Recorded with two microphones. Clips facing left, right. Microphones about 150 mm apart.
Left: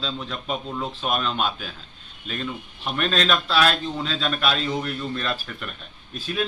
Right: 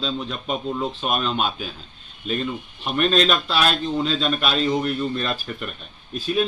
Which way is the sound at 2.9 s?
5° right (ahead or behind).